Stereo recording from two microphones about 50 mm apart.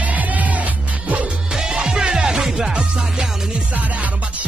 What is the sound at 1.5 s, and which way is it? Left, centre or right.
Music, centre.